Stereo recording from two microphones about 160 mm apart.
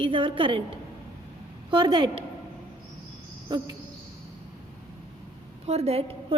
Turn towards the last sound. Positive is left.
turn(degrees=-40)  # may be behind; listen again after turning